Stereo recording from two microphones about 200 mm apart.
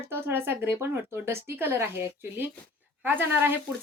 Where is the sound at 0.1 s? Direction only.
10° right (ahead or behind).